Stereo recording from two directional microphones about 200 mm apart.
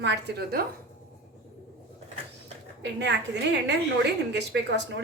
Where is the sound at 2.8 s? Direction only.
60° right (ahead or behind).